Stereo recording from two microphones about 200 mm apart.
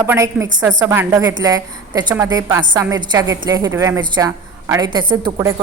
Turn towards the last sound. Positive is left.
turn(degrees=-25)  # may be behind; listen again after turning